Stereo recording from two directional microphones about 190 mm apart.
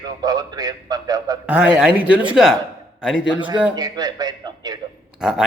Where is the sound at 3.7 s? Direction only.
20° right (ahead or behind).